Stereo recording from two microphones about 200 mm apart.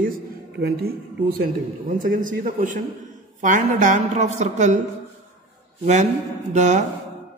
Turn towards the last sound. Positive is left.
turn(degrees=-35)  # may be behind; listen again after turning